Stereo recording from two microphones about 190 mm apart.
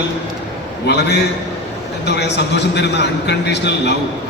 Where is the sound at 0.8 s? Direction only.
60° left (ahead or behind).